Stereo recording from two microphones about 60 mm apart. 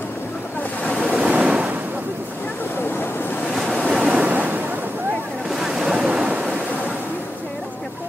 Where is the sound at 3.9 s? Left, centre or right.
Centre.